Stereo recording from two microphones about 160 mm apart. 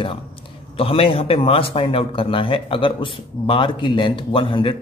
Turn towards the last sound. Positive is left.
turn(degrees=30)  # may be behind; listen again after turning